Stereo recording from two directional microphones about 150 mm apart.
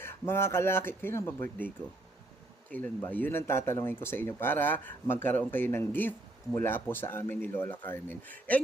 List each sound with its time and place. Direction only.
0.0 s speech: 15° left (ahead or behind)